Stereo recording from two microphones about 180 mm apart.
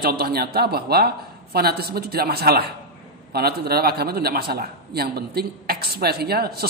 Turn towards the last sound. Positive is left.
turn(degrees=-60)  # may be behind; listen again after turning